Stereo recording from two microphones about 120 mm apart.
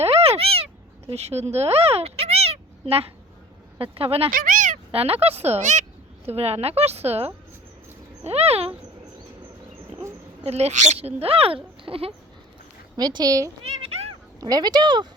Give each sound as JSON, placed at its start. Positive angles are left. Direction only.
{"t": 0.0, "sound": "meow", "side_deg": -55}
{"t": 3.8, "sound": "speech", "side_deg": -50}
{"t": 4.4, "sound": "a sound", "side_deg": -90}
{"t": 4.9, "sound": "speech", "side_deg": -55}
{"t": 6.2, "sound": "speech", "side_deg": -60}
{"t": 10.4, "sound": "speech", "side_deg": -65}
{"t": 13.0, "sound": "speech", "side_deg": -35}
{"t": 13.7, "sound": "a sound", "side_deg": -60}
{"t": 14.4, "sound": "speech", "side_deg": -35}